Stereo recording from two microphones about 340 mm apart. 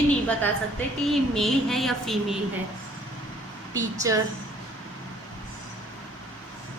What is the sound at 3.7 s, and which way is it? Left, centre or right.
Speech, centre.